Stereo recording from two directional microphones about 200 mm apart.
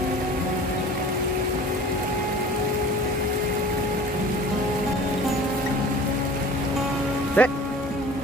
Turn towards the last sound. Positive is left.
turn(degrees=10)  # may be behind; listen again after turning